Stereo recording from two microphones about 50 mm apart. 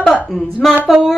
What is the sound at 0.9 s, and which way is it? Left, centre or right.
Speech, centre.